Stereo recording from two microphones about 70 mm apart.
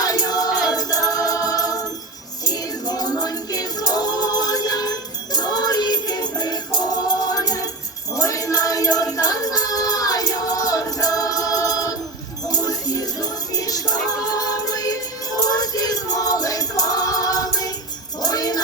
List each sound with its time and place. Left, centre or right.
0.0 s music: left
18.2 s jingle bell: left